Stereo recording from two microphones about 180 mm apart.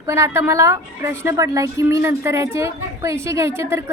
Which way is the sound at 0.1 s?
15° right (ahead or behind).